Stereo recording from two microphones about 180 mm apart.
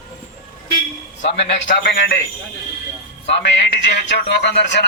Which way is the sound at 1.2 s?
45° left (ahead or behind).